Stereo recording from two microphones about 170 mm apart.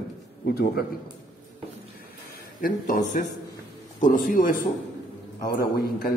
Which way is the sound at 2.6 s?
50° left (ahead or behind).